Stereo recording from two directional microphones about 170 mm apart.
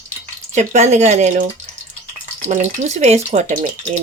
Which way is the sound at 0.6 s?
40° right (ahead or behind).